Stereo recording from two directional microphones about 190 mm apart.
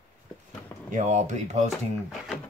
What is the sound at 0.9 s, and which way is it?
Speech, 40° right (ahead or behind).